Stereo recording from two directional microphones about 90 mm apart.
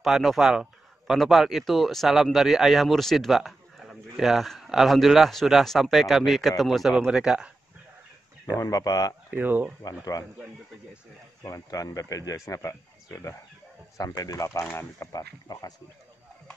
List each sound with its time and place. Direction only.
0.0 s speech: centre (ahead or behind)
8.5 s speech: 40° left (ahead or behind)
9.3 s speech: 20° right (ahead or behind)
11.4 s speech: 40° left (ahead or behind)
14.7 s speech: 25° left (ahead or behind)
15.1 s speech: 45° left (ahead or behind)